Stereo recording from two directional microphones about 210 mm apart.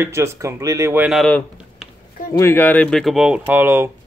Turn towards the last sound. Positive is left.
turn(degrees=-10)  # may be behind; listen again after turning